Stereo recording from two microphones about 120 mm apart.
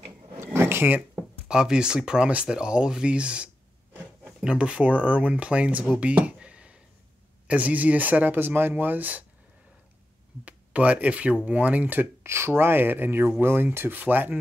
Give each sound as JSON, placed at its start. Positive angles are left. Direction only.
{"t": 0.4, "sound": "a sound", "side_deg": -20}
{"t": 1.1, "sound": "speech", "side_deg": -5}
{"t": 10.4, "sound": "speech", "side_deg": -10}